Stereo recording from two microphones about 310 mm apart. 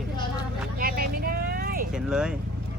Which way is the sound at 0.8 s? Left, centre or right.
Right.